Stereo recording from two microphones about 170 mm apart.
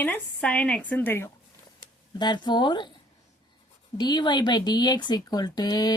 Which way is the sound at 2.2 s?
25° left (ahead or behind).